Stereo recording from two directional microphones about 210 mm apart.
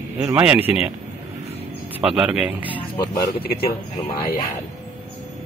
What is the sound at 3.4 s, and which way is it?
Speech, 45° left (ahead or behind).